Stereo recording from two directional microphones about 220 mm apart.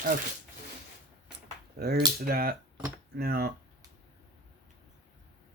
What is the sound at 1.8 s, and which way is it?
Speech, 45° right (ahead or behind).